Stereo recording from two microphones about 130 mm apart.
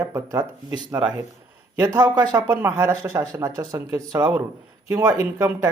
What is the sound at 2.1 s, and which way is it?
Speech, 30° right (ahead or behind).